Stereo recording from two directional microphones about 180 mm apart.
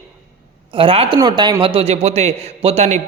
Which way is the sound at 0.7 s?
30° right (ahead or behind).